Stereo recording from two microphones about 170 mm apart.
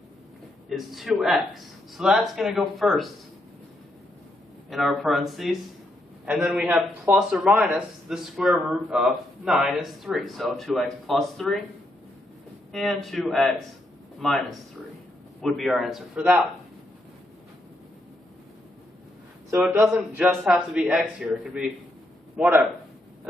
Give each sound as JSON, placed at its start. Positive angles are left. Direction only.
{"t": 0.7, "sound": "a man's voice", "side_deg": 0}
{"t": 4.6, "sound": "a man's voice", "side_deg": 0}
{"t": 12.7, "sound": "a man's voice", "side_deg": 0}
{"t": 19.5, "sound": "speech", "side_deg": -15}
{"t": 19.8, "sound": "a man's voice", "side_deg": 0}